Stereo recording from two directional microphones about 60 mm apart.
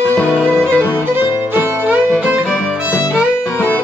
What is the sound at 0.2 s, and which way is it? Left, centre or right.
Music, centre.